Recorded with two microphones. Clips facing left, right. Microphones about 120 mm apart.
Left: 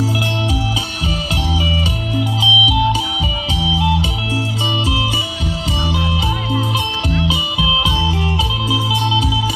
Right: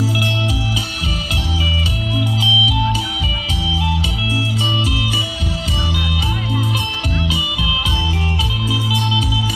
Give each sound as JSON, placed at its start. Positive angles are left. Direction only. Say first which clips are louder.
{"t": 2.4, "sound": "music", "louder": "left 3 dB", "side_deg": 20}
{"t": 5.9, "sound": "music", "louder": "left 5 dB", "side_deg": 25}